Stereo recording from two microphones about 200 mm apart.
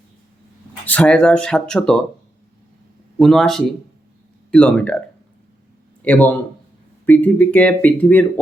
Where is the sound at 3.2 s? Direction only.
Centre (ahead or behind).